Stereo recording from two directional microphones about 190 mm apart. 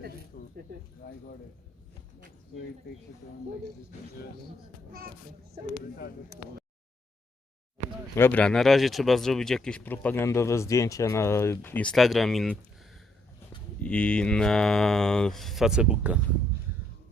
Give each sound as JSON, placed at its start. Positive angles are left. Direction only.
{"t": 0.3, "sound": "a sound", "side_deg": 55}
{"t": 1.0, "sound": "speech", "side_deg": 50}
{"t": 4.9, "sound": "a child's voice", "side_deg": -50}
{"t": 6.3, "sound": "speech", "side_deg": -55}
{"t": 8.1, "sound": "speech", "side_deg": 10}
{"t": 13.8, "sound": "speech", "side_deg": 5}